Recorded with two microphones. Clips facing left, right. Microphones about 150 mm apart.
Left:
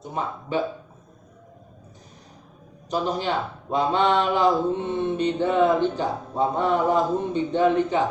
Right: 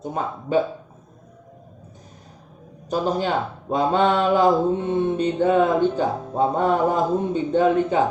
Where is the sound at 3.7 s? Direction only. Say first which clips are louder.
Right 2 dB; 45° right (ahead or behind).